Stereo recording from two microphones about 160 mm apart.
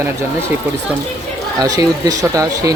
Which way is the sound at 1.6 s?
25° right (ahead or behind).